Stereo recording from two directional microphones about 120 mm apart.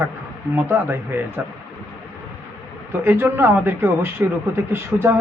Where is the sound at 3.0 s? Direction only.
20° right (ahead or behind).